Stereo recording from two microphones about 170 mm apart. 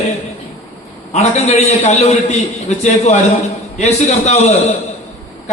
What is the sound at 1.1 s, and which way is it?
A man's voice, 40° left (ahead or behind).